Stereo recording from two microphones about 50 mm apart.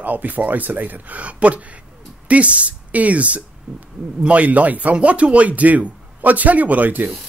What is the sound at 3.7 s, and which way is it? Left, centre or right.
Speech, centre.